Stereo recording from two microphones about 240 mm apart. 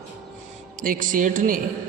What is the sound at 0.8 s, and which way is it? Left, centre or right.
Speech, right.